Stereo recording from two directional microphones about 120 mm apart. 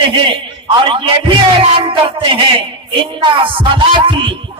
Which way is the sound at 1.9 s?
45° right (ahead or behind).